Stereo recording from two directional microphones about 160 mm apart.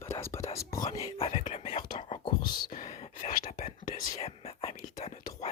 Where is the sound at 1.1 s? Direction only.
35° left (ahead or behind).